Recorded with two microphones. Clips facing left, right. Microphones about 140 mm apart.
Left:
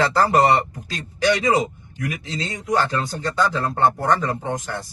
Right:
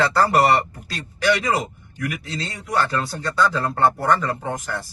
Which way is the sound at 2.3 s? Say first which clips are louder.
Left 3 dB; 20° left (ahead or behind).